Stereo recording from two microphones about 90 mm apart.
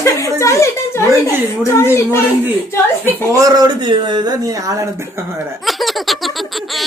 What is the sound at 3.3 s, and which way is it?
Speech, 45° right (ahead or behind).